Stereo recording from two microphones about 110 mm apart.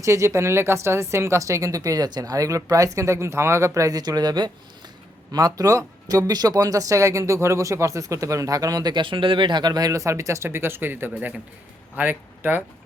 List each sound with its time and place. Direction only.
0.0 s speech: 25° right (ahead or behind)